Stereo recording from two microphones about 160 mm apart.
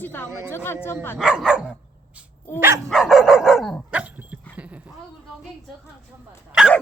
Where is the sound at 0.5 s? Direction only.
15° left (ahead or behind).